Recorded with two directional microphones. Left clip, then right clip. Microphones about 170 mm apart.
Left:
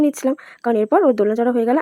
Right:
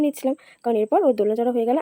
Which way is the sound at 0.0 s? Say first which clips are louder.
Left 4 dB; 15° left (ahead or behind).